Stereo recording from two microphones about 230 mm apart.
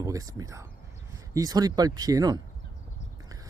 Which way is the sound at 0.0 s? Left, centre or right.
Centre.